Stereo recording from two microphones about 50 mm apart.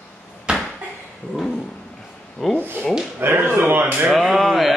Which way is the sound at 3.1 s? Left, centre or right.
Right.